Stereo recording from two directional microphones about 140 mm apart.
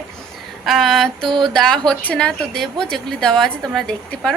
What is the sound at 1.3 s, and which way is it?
Speech, 35° right (ahead or behind).